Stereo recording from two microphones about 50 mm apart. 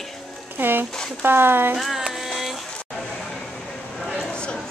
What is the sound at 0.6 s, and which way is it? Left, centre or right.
Speech, right.